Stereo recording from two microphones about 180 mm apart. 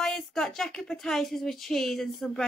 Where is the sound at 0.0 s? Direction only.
5° left (ahead or behind).